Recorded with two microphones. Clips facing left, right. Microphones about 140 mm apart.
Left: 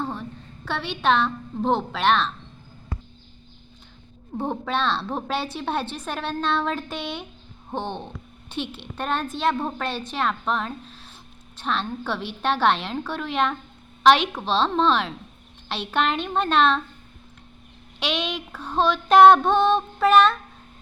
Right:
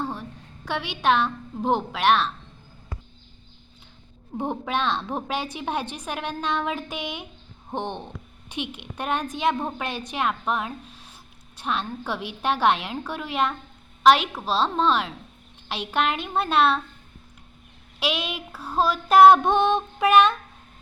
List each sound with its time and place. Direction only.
0.1 s a woman's voice: 10° right (ahead or behind)
4.4 s a woman's voice: 15° right (ahead or behind)
18.0 s a woman's voice: 10° right (ahead or behind)